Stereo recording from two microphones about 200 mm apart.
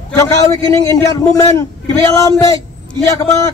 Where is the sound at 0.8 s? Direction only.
15° left (ahead or behind).